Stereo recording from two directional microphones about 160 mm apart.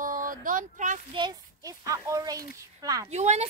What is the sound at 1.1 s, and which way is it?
Speech, 25° right (ahead or behind).